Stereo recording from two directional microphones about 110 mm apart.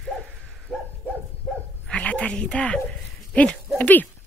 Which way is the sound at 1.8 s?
10° left (ahead or behind).